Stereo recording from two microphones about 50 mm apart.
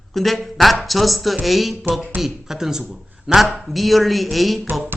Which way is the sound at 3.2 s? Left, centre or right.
Centre.